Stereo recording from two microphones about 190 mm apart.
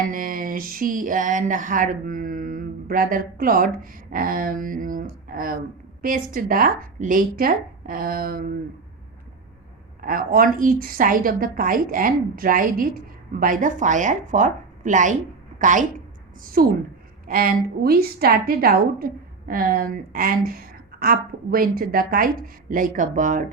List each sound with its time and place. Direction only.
0.1 s a woman's voice: 45° right (ahead or behind)
10.0 s a woman's voice: 50° right (ahead or behind)